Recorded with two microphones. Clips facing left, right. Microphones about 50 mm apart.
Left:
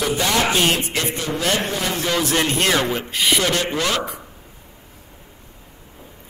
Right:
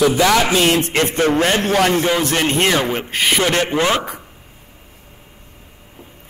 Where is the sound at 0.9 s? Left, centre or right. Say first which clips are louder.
Right 8 dB; right.